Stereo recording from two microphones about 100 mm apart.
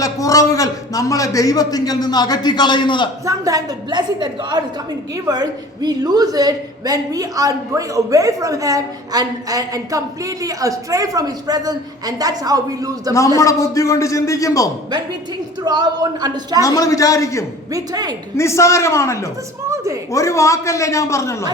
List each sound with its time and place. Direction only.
0.0 s a man's voice: 35° left (ahead or behind); by 3.1 s 50° left (ahead or behind)
3.2 s a woman's voice: 35° right (ahead or behind)
3.8 s a woman's voice: 45° right (ahead or behind)
13.4 s a man's voice: 30° left (ahead or behind)
15.6 s a woman's voice: 45° right (ahead or behind)
16.6 s a man's voice: 35° left (ahead or behind)
17.7 s a woman's voice: 40° right (ahead or behind)
18.3 s a man's voice: 30° left (ahead or behind)
19.6 s a woman's voice: 30° right (ahead or behind)
20.1 s a man's voice: 30° left (ahead or behind)